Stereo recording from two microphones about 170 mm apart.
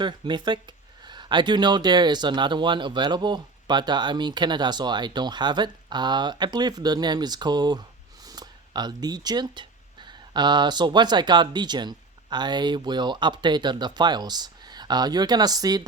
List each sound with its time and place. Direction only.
0.0 s speech: 25° right (ahead or behind)